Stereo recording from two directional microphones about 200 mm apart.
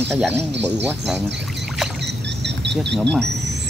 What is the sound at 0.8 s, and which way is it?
Speech, 5° right (ahead or behind).